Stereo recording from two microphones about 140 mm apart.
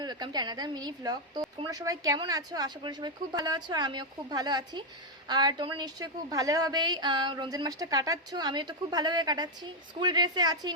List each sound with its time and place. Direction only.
0.0 s a woman's voice: 30° right (ahead or behind)